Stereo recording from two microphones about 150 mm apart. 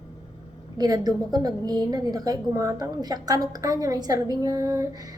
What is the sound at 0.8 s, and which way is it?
A woman's voice, 25° right (ahead or behind).